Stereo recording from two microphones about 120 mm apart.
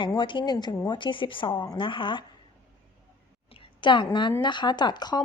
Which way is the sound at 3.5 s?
45° left (ahead or behind).